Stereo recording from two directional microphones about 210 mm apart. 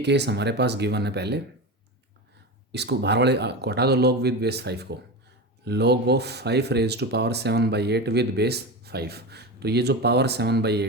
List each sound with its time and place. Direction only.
0.0 s speech: 55° right (ahead or behind)
2.7 s speech: 55° right (ahead or behind)